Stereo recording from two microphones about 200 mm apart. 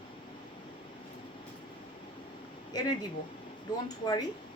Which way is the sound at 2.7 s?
20° left (ahead or behind).